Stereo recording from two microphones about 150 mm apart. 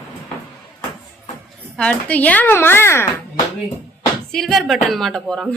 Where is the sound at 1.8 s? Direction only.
10° left (ahead or behind).